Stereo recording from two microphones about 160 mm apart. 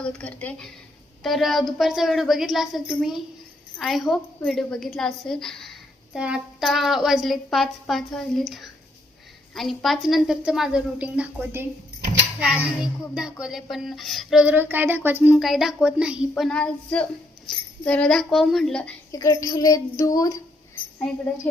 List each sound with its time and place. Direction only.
0.0 s a woman's voice: 10° left (ahead or behind)
16.3 s speech: 5° left (ahead or behind)
19.1 s speech: 20° left (ahead or behind)